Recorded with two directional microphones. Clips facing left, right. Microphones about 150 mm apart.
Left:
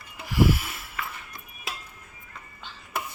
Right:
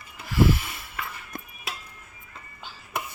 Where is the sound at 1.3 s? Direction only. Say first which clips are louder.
Right 7 dB; 55° right (ahead or behind).